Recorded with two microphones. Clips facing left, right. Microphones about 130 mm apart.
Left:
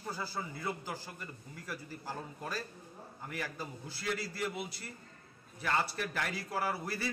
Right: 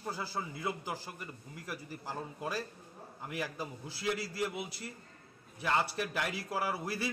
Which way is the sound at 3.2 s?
15° right (ahead or behind).